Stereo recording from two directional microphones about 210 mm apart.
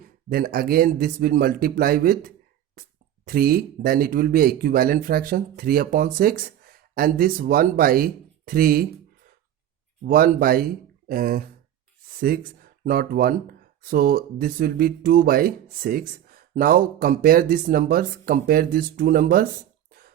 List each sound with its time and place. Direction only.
0.0 s speech: 45° right (ahead or behind)
10.0 s speech: 40° right (ahead or behind)
19.9 s beatboxing: 45° right (ahead or behind)